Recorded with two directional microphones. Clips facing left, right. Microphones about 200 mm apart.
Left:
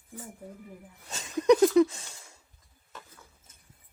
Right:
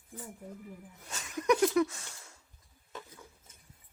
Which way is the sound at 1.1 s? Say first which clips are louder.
Left 7 dB; 25° left (ahead or behind).